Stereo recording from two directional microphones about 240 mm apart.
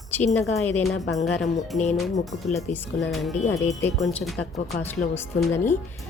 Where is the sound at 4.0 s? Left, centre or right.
Centre.